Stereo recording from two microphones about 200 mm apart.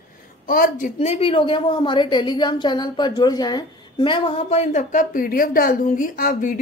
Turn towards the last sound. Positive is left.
turn(degrees=45)  # may be behind; listen again after turning